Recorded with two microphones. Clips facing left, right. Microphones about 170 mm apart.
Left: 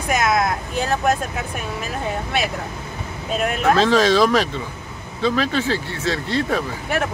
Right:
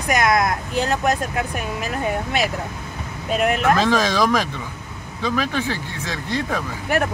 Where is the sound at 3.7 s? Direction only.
15° right (ahead or behind).